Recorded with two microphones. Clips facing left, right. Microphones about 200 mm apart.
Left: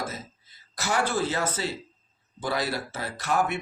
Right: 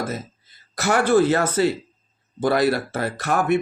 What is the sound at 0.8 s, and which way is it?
Speech, 60° right (ahead or behind).